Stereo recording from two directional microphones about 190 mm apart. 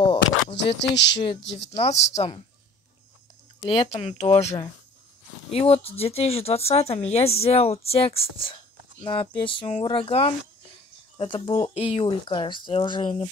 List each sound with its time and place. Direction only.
0.0 s a sound: 30° left (ahead or behind)
0.7 s speech: 65° left (ahead or behind)
1.7 s speech: 30° left (ahead or behind)
3.6 s speech: 30° left (ahead or behind)